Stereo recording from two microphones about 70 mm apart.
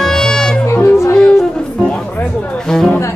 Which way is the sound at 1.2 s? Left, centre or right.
Centre.